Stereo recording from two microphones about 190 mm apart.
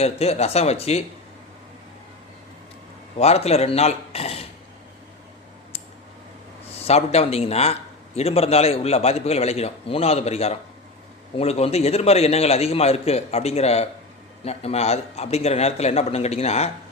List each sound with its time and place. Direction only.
0.0 s a man's voice: 35° left (ahead or behind)
3.2 s a man's voice: 35° left (ahead or behind)
6.7 s a man's voice: 30° left (ahead or behind)